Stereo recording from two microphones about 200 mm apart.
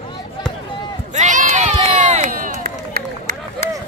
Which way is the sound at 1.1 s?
35° right (ahead or behind).